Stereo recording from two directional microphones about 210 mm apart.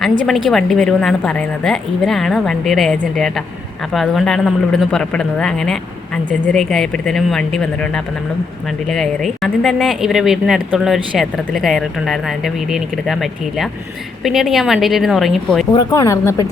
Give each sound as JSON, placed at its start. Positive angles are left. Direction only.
{"t": 0.3, "sound": "speech", "side_deg": 0}
{"t": 15.7, "sound": "speech", "side_deg": 20}